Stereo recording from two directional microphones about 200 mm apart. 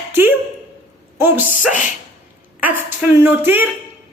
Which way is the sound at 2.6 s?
10° right (ahead or behind).